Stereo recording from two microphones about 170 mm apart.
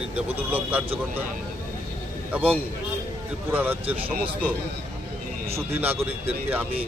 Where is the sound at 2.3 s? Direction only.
10° right (ahead or behind).